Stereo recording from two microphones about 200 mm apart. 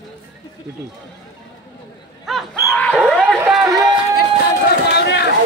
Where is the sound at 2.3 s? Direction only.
5° left (ahead or behind).